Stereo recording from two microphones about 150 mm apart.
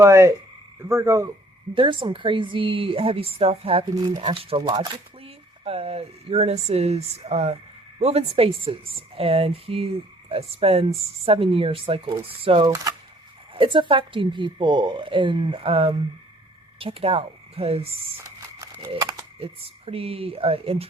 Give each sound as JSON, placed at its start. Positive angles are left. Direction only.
{"t": 0.0, "sound": "speech", "side_deg": -20}
{"t": 1.7, "sound": "speech", "side_deg": -35}
{"t": 5.6, "sound": "speech", "side_deg": -40}
{"t": 18.2, "sound": "crumpling", "side_deg": -20}
{"t": 19.4, "sound": "speech", "side_deg": -40}